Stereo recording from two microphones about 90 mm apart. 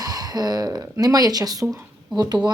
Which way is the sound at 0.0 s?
45° right (ahead or behind).